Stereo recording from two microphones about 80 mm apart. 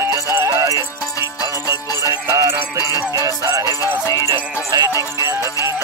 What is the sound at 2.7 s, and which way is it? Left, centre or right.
Music, left.